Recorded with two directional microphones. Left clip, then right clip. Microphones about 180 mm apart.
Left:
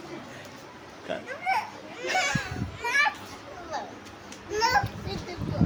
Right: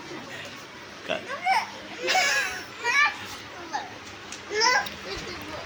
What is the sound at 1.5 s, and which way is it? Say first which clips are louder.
Children playing: right 3 dB; 30° left (ahead or behind).